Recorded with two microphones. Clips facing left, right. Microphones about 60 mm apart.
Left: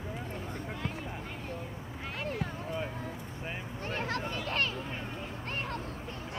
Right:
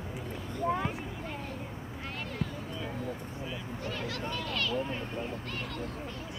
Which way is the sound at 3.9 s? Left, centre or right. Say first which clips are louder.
Left 2 dB; left.